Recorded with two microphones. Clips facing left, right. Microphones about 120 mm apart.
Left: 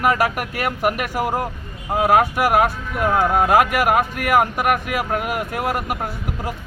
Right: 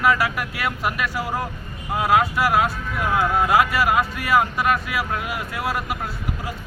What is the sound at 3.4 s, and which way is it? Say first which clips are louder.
A man's voice: left 3 dB; 50° left (ahead or behind).